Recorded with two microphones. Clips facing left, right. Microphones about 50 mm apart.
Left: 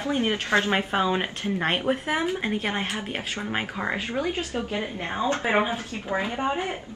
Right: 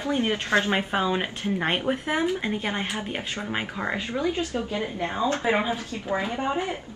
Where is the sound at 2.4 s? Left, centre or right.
Centre.